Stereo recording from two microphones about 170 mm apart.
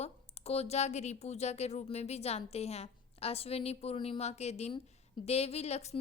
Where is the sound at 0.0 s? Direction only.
40° left (ahead or behind).